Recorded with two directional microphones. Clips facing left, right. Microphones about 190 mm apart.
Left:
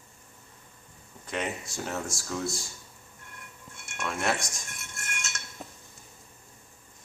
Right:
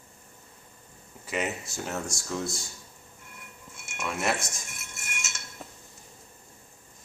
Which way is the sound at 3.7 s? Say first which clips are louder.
Even; 5° right (ahead or behind).